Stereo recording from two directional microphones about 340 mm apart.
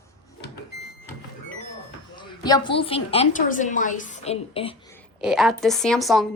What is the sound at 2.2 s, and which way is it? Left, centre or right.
A woman's voice, centre.